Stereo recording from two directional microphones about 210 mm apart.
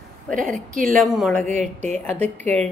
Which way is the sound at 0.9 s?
Centre (ahead or behind).